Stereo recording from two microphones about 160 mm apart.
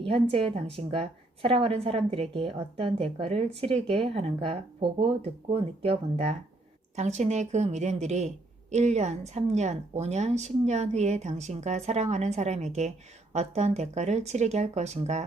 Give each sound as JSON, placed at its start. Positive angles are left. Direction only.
{"t": 0.0, "sound": "a woman's voice", "side_deg": -35}